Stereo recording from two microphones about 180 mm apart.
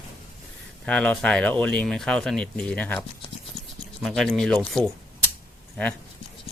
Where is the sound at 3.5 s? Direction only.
35° left (ahead or behind).